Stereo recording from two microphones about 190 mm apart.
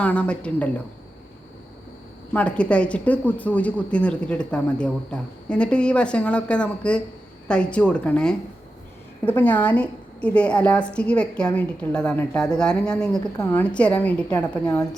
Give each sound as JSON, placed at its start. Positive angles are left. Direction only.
{"t": 0.0, "sound": "a woman's voice", "side_deg": 5}
{"t": 2.3, "sound": "a woman's voice", "side_deg": 5}